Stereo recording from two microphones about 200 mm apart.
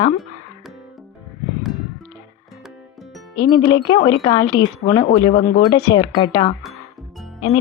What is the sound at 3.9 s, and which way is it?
A woman's voice, 20° left (ahead or behind).